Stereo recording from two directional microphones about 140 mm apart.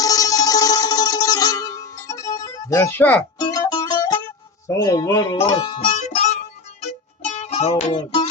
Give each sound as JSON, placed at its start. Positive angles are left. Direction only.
{"t": 0.0, "sound": "music", "side_deg": 25}
{"t": 3.3, "sound": "mandolin", "side_deg": 30}
{"t": 4.8, "sound": "music", "side_deg": 25}
{"t": 5.4, "sound": "speech", "side_deg": 35}
{"t": 5.9, "sound": "music", "side_deg": 60}
{"t": 7.9, "sound": "music", "side_deg": 35}